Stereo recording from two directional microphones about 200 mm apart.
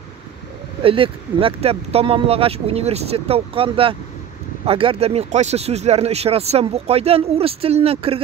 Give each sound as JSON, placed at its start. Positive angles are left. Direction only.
{"t": 0.8, "sound": "speech", "side_deg": -25}